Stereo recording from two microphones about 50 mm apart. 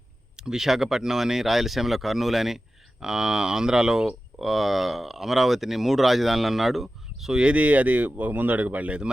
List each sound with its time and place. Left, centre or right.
0.3 s speech: centre
7.3 s speech: right